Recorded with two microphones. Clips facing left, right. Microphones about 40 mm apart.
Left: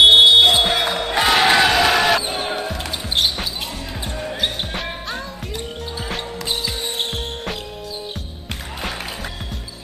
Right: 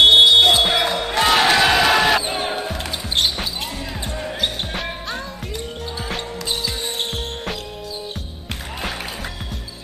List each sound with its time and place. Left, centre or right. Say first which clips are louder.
0.0 s music: left 1 dB; centre
0.7 s basketball bounce: even; centre
4.4 s music: even; centre